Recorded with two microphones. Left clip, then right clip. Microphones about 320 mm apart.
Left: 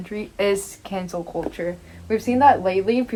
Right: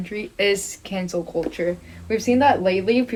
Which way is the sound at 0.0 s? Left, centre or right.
Centre.